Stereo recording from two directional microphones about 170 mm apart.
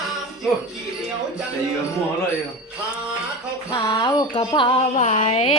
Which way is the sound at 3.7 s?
25° left (ahead or behind).